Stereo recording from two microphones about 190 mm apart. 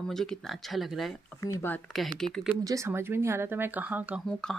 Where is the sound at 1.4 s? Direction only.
15° left (ahead or behind).